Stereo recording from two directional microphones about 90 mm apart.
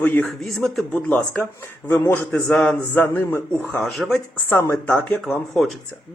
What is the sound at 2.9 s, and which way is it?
Speech, 25° left (ahead or behind).